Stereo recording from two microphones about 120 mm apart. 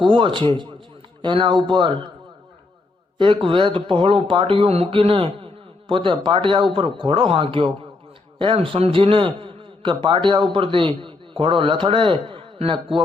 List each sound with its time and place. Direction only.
0.0 s speech: 45° right (ahead or behind)
3.2 s a man's voice: 45° right (ahead or behind)